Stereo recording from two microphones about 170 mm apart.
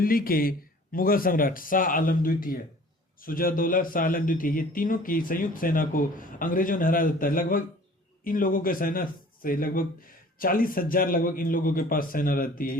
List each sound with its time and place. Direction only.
0.0 s a man's voice: 60° left (ahead or behind)